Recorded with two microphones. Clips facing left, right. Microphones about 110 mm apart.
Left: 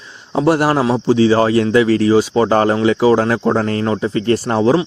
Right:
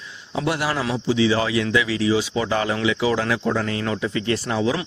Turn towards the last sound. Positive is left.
turn(degrees=45)  # may be behind; listen again after turning